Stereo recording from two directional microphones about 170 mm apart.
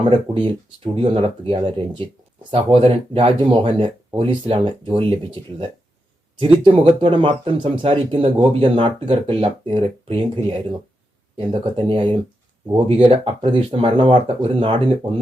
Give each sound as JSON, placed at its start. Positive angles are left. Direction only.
{"t": 0.0, "sound": "speech", "side_deg": -30}